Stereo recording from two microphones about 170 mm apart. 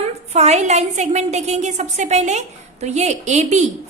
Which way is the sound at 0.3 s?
40° right (ahead or behind).